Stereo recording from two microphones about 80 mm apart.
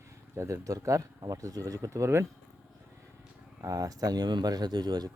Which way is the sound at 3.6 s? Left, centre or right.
Right.